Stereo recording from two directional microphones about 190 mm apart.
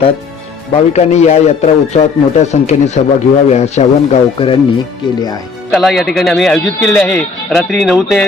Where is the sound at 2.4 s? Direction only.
35° left (ahead or behind).